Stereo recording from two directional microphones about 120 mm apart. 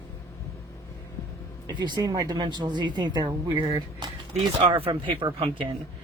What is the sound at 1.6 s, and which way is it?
A woman's voice, 35° right (ahead or behind).